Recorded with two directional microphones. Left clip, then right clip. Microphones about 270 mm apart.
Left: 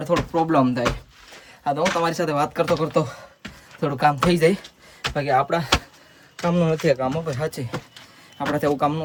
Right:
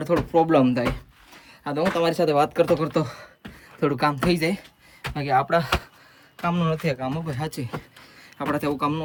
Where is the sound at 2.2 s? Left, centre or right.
Centre.